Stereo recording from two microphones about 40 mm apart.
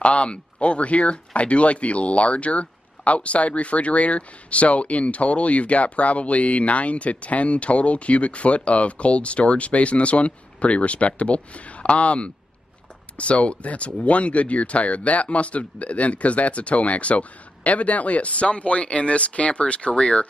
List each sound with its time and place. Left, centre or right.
0.0 s speech: left